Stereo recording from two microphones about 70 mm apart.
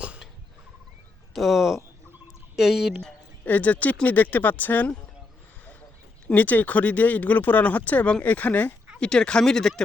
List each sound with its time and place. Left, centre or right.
0.0 s a sound: centre
1.3 s speech: centre
3.4 s speech: left
6.2 s speech: left; by 9.8 s centre